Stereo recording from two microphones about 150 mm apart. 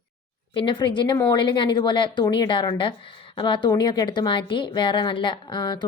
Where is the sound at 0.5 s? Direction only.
35° left (ahead or behind).